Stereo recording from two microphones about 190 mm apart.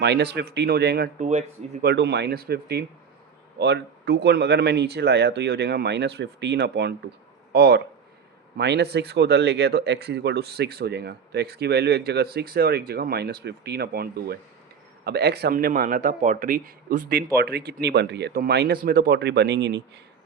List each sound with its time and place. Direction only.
0.0 s speech: 60° right (ahead or behind)
1.3 s speech: 40° right (ahead or behind)
1.8 s a man's voice: 60° right (ahead or behind)